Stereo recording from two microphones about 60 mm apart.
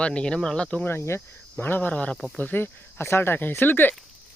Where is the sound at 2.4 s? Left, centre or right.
Left.